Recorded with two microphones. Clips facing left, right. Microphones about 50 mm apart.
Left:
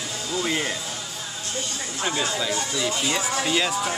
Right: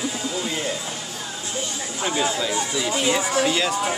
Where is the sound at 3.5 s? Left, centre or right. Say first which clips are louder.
Right 1 dB; centre.